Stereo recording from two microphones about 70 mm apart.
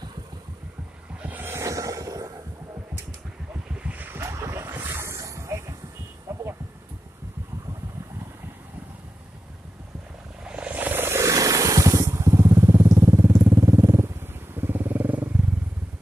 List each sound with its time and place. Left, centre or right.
1.2 s a sound: right
1.5 s music: right
3.7 s waves: right
4.2 s boat: right
4.6 s vehicle: right
6.3 s a sound: right
10.4 s music: centre; by 11.2 s right
11.2 s vehicle: right
13.0 s a sound: right
13.7 s vehicle: right